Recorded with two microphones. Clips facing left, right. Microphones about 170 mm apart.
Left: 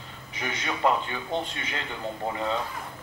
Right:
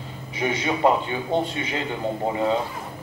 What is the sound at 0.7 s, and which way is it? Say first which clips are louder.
Speech: right 4 dB; 35° right (ahead or behind).